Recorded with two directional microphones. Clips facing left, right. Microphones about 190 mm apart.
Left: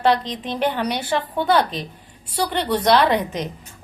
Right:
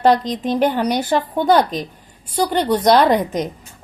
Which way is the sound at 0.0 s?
45° right (ahead or behind).